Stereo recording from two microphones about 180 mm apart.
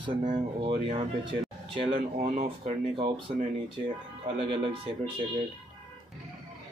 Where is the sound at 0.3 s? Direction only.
30° right (ahead or behind).